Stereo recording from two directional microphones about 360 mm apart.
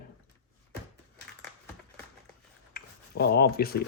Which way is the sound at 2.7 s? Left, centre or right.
Left.